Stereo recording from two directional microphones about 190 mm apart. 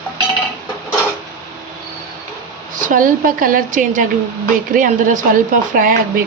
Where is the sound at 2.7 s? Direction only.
45° right (ahead or behind).